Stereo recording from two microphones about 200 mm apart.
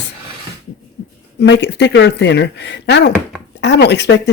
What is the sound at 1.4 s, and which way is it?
Speech, 60° left (ahead or behind).